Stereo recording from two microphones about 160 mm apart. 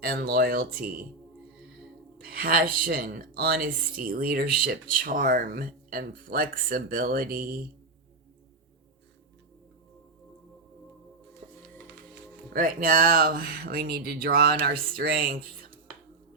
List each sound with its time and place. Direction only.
0.0 s speech: 70° right (ahead or behind)
2.2 s speech: 65° right (ahead or behind)
11.4 s music: 50° right (ahead or behind)
12.5 s speech: 60° right (ahead or behind)